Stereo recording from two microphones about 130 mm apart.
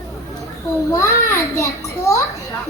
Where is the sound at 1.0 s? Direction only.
25° left (ahead or behind).